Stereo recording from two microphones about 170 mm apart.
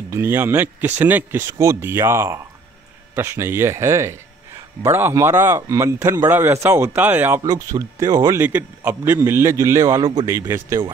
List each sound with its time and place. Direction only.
0.1 s speech: 15° right (ahead or behind)